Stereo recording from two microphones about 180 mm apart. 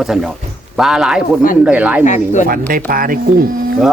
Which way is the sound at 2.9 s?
50° right (ahead or behind).